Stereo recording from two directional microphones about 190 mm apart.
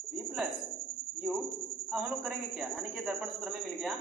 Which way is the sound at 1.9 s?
Centre (ahead or behind).